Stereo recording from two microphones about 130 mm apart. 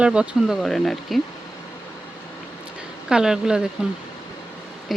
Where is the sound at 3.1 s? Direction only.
5° right (ahead or behind).